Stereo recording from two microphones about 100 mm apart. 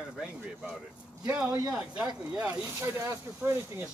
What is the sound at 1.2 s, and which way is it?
Speech, 15° right (ahead or behind).